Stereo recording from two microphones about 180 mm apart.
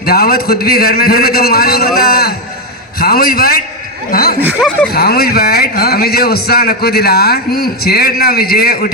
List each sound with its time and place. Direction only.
0.0 s speech: 55° left (ahead or behind)
4.4 s speech: 10° right (ahead or behind)
4.9 s speech: 60° left (ahead or behind)